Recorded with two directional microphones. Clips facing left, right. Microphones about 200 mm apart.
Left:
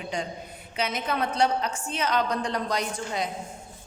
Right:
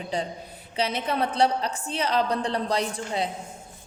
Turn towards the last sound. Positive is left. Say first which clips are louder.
# right 2 dB
turn(degrees=-30)  # may be behind; listen again after turning